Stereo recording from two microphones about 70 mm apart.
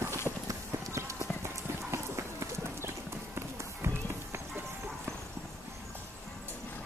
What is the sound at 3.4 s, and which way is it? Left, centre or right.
Run, right.